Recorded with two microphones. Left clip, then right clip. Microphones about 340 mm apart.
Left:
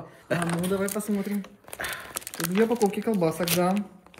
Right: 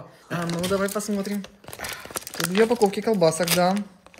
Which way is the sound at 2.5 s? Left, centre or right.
Right.